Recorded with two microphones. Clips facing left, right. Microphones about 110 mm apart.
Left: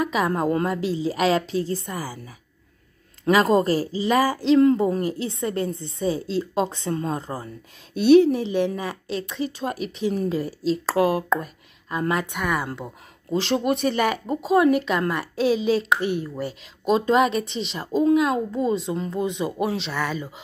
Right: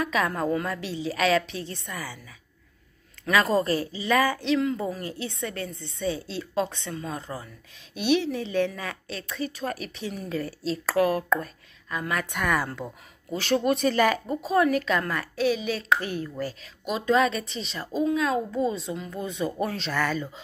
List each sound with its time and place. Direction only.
0.0 s a woman's voice: 25° left (ahead or behind)
3.3 s a woman's voice: 25° left (ahead or behind); by 8.4 s 40° left (ahead or behind)
8.4 s speech: 25° left (ahead or behind)
12.4 s speech: 10° left (ahead or behind)
13.3 s speech: 25° left (ahead or behind)
13.6 s speech: 10° left (ahead or behind)
16.8 s speech: 35° left (ahead or behind); by 19.9 s 15° left (ahead or behind)
19.9 s speech: 5° left (ahead or behind)